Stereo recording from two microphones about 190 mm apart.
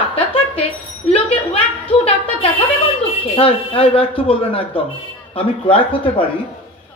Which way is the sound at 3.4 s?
30° left (ahead or behind).